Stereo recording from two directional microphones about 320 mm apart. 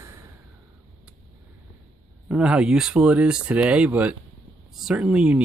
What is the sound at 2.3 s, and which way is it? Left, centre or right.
Speech, centre.